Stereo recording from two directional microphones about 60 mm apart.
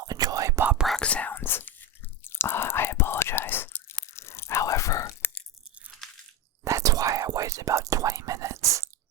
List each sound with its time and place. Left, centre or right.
0.0 s whispering: right
1.0 s whispering: left
1.3 s whispering: left
4.1 s biting: left
4.6 s whispering: left
6.7 s whispering: right